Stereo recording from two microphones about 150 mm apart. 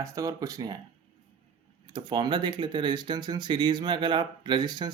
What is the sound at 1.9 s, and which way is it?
Speech, 30° right (ahead or behind).